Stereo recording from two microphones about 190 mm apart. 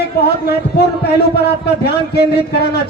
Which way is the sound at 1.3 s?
60° left (ahead or behind).